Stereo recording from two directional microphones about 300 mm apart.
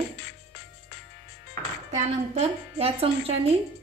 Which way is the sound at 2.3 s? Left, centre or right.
Centre.